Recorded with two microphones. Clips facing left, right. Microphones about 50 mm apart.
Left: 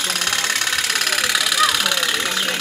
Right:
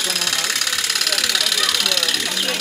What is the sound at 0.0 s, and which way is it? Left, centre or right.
Engine, left.